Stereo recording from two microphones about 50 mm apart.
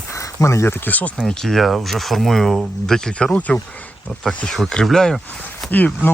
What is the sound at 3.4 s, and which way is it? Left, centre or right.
Speech, left.